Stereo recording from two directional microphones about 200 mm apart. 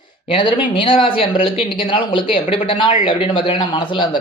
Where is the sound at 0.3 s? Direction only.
25° left (ahead or behind).